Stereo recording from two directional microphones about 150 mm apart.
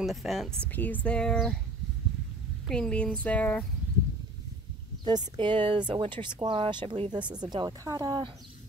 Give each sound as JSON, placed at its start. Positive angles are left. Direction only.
{"t": 0.0, "sound": "speech", "side_deg": 0}
{"t": 2.7, "sound": "speech", "side_deg": 5}
{"t": 5.0, "sound": "speech", "side_deg": -30}